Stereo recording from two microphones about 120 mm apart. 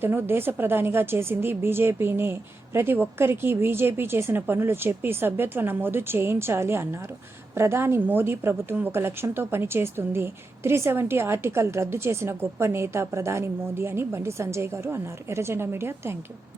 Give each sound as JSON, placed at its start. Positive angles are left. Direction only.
{"t": 0.0, "sound": "a woman's voice", "side_deg": -20}